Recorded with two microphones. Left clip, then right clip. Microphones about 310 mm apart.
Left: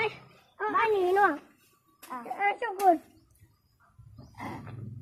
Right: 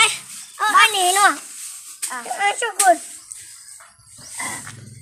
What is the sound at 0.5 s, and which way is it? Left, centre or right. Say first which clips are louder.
Speech: right 12 dB; right.